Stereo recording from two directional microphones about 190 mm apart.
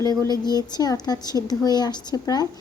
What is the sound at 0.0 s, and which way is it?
A woman's voice, 20° left (ahead or behind).